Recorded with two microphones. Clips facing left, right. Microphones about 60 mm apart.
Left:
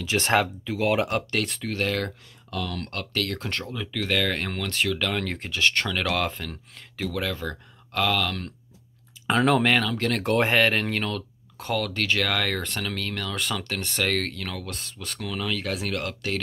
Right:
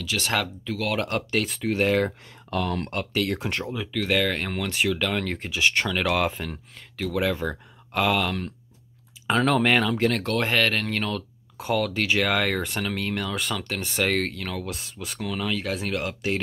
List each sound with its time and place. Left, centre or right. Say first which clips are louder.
0.0 s speech: left 4 dB; left
1.0 s speech: right 1 dB; centre
1.7 s speech: right 8 dB; centre
2.5 s speech: right 5 dB; right
2.9 s speech: right 3 dB; centre
9.3 s speech: even; centre
9.8 s speech: right 3 dB; centre
10.2 s speech: left 2 dB; centre
13.4 s speech: even; centre